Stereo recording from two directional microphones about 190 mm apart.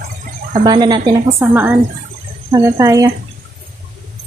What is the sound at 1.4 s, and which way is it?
Speech, 10° right (ahead or behind).